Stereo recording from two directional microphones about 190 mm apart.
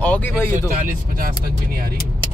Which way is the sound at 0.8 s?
50° right (ahead or behind).